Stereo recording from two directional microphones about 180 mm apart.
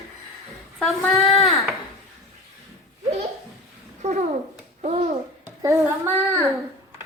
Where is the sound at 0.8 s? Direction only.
Centre (ahead or behind).